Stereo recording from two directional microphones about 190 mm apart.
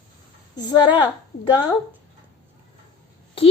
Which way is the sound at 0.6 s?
20° left (ahead or behind).